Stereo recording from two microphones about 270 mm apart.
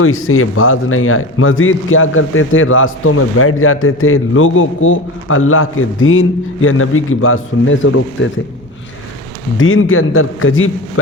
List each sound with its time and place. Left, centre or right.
0.0 s a man's voice: left
9.6 s a man's voice: left